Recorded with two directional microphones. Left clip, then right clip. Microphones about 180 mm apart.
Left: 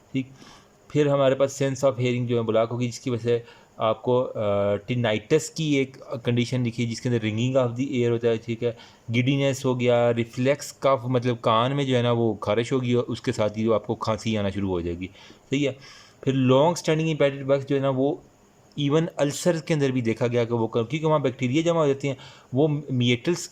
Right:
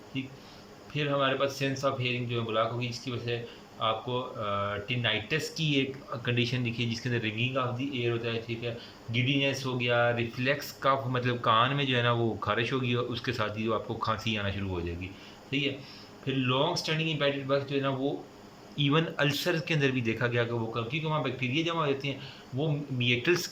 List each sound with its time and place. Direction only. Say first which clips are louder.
0.9 s speech: left 8 dB; 40° left (ahead or behind)
20.7 s speech: left 10 dB; 40° left (ahead or behind)
23.2 s speech: even; 30° left (ahead or behind)